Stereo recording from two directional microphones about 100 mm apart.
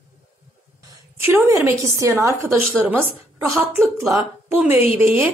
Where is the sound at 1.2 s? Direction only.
20° right (ahead or behind).